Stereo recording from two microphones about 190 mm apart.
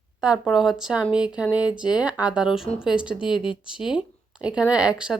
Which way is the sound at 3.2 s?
25° left (ahead or behind).